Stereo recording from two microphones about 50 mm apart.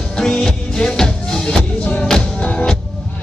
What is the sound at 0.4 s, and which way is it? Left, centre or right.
Music, centre.